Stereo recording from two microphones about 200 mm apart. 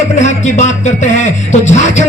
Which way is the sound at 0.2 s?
35° left (ahead or behind).